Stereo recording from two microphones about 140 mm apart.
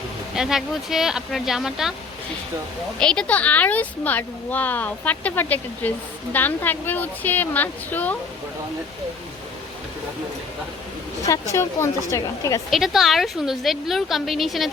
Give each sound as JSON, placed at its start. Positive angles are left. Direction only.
{"t": 0.3, "sound": "a woman's voice", "side_deg": -5}
{"t": 3.0, "sound": "speech", "side_deg": 5}
{"t": 11.3, "sound": "a woman's voice", "side_deg": 25}
{"t": 12.7, "sound": "a woman's voice", "side_deg": 0}